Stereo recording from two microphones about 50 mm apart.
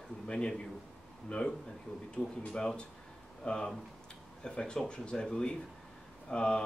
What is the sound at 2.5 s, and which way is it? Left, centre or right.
Speech, centre.